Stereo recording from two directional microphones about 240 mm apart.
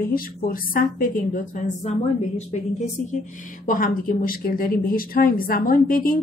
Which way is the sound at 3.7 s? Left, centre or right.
Left.